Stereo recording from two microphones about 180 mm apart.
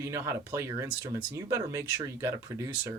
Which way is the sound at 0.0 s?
15° right (ahead or behind).